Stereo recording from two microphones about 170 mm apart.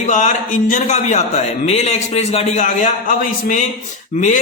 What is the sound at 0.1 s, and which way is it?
A man's voice, 45° left (ahead or behind).